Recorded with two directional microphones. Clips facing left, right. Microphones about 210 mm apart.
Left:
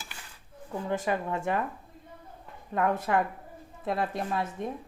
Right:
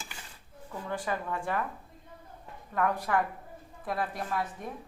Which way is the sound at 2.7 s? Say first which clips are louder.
Left 2 dB; 25° left (ahead or behind).